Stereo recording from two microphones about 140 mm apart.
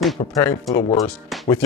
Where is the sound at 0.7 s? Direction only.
25° left (ahead or behind).